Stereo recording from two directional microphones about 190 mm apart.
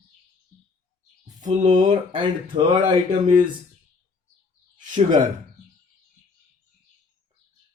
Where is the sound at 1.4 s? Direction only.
40° right (ahead or behind).